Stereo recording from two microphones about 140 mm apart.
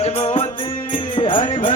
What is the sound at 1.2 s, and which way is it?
Music, 35° left (ahead or behind).